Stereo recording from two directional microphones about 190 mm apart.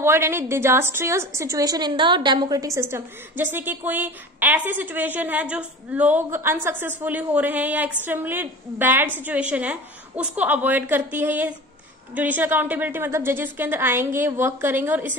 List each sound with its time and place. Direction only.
0.0 s a woman's voice: 10° right (ahead or behind)